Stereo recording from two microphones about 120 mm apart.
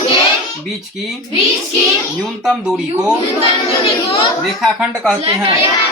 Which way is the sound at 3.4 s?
50° left (ahead or behind).